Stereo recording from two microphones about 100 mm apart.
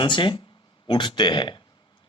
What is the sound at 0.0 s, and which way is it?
A man's voice, 55° left (ahead or behind).